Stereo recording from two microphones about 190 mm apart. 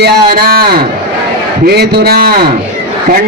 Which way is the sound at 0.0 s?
55° right (ahead or behind).